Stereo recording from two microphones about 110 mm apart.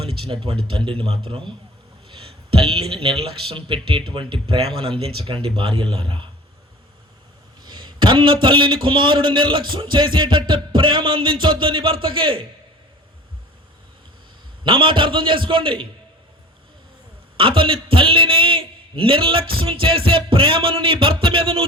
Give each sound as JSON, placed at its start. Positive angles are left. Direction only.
{"t": 0.0, "sound": "a man's voice", "side_deg": -55}
{"t": 2.7, "sound": "speech", "side_deg": -60}
{"t": 4.8, "sound": "a man's voice", "side_deg": -60}
{"t": 7.6, "sound": "a man's voice", "side_deg": -45}
{"t": 14.6, "sound": "a man's voice", "side_deg": -50}
{"t": 17.3, "sound": "a man's voice", "side_deg": -55}